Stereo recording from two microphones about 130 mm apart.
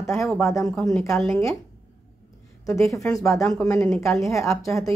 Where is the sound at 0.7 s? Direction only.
5° left (ahead or behind).